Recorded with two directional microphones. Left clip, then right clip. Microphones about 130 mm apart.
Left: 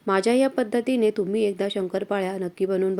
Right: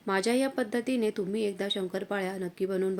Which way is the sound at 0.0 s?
20° left (ahead or behind).